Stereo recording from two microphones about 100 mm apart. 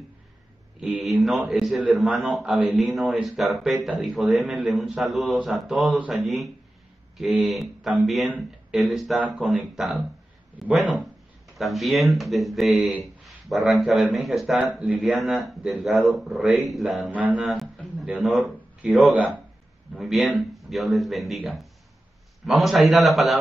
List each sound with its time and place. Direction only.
0.7 s speech: 5° right (ahead or behind)
17.1 s speech: 15° right (ahead or behind)
17.4 s a sound: centre (ahead or behind)
18.0 s a man's voice: 5° right (ahead or behind)
19.1 s speech: 15° right (ahead or behind)
19.9 s speech: centre (ahead or behind)